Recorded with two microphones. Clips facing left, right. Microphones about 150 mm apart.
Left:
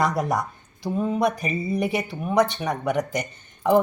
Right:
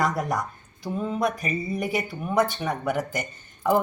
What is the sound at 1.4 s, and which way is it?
Speech, 20° left (ahead or behind).